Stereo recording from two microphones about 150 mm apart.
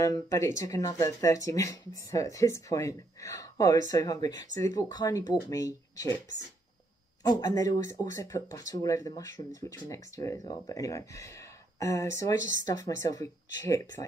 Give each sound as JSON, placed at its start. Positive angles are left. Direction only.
{"t": 0.0, "sound": "speech", "side_deg": 20}
{"t": 7.2, "sound": "speech", "side_deg": 25}